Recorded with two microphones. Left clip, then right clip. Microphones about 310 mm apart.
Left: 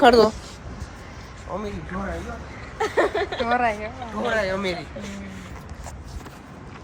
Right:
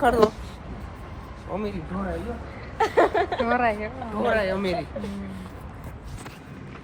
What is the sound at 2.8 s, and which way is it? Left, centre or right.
Speech, right.